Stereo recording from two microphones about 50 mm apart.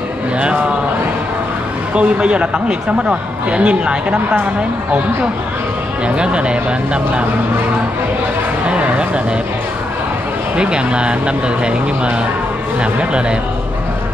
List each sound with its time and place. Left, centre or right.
0.4 s speech: right
2.0 s speech: right
6.0 s speech: right
8.6 s a sound: right
10.6 s speech: centre